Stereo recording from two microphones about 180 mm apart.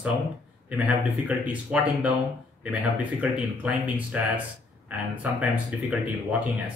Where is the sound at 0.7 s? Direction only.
5° right (ahead or behind).